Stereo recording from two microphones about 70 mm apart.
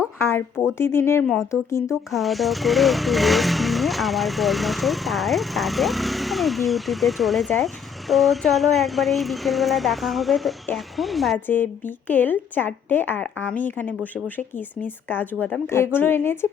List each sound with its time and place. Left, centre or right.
0.2 s a sound: left
0.8 s a woman's voice: left
1.9 s speech: centre
11.4 s a woman's voice: left